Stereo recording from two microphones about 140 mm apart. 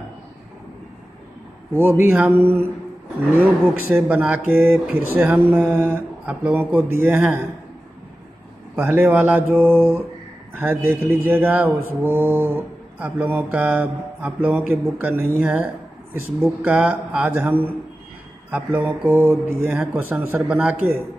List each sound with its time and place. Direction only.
1.7 s mantra: 15° right (ahead or behind)
3.9 s mantra: 10° right (ahead or behind)
8.7 s mantra: 15° right (ahead or behind)